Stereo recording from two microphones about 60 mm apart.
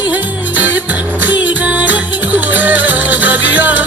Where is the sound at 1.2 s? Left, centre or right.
Right.